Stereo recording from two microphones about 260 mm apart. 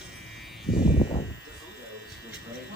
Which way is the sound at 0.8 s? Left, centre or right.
Left.